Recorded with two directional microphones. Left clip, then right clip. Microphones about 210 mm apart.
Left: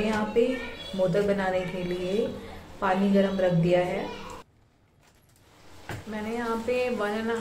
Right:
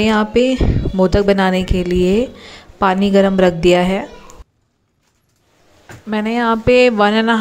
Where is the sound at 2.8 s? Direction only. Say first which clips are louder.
Right 11 dB; 50° right (ahead or behind).